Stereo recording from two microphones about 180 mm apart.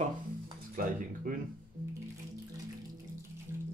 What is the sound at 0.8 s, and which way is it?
Speech, 50° right (ahead or behind).